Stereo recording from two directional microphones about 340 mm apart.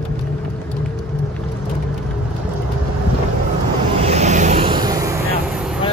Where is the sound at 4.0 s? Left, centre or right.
Centre.